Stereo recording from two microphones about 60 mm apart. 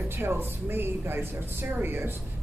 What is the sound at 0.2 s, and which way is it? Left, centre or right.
A woman's voice, right.